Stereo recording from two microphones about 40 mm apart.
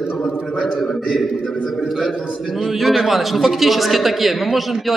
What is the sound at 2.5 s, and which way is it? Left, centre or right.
A man's voice, centre.